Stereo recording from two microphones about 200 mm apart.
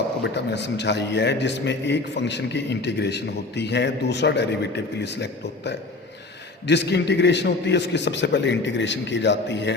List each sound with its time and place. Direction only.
0.2 s a man's voice: 60° left (ahead or behind)